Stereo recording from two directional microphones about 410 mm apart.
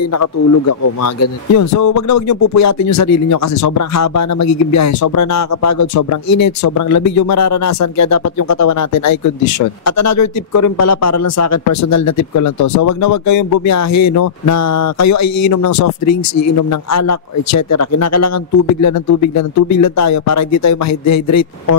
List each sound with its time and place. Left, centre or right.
0.1 s a man's voice: left